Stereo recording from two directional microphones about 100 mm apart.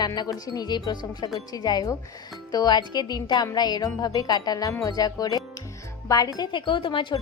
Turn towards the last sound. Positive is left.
turn(degrees=55)  # may be behind; listen again after turning